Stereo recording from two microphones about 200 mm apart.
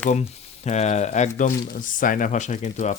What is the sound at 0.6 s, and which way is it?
Speech, 35° left (ahead or behind).